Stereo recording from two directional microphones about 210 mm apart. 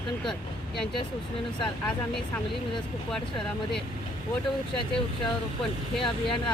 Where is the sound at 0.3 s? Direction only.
25° left (ahead or behind).